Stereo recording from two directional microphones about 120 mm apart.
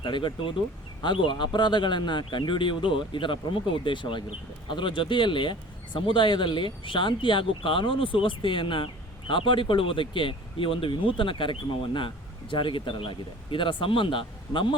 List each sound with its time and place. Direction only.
0.0 s speech: 40° left (ahead or behind)